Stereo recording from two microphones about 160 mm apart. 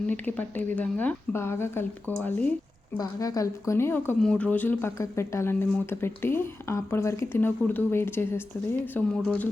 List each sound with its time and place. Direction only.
0.1 s speech: 10° left (ahead or behind)
3.0 s a woman's voice: 20° left (ahead or behind); by 9.5 s 5° left (ahead or behind)